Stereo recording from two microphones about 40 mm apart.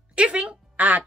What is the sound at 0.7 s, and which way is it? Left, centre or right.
Speech, right.